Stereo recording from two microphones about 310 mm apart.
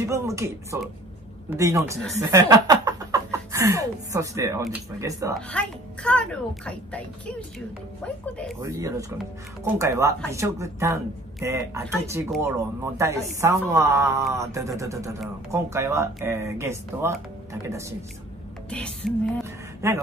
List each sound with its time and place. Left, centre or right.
0.0 s speech: centre
5.5 s a child's voice: centre
8.6 s speech: centre
18.7 s a child's voice: centre
19.8 s speech: centre